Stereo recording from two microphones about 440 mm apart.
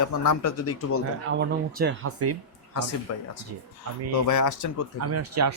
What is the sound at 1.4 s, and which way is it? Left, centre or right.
Speech, right.